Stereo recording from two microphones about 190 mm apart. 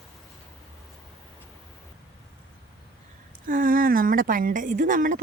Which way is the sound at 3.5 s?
45° right (ahead or behind).